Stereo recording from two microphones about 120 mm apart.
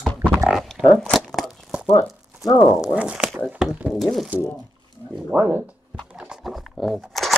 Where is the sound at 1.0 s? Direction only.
Centre (ahead or behind).